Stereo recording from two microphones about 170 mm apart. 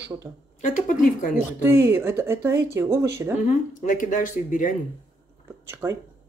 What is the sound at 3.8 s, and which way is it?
Speech, 50° left (ahead or behind).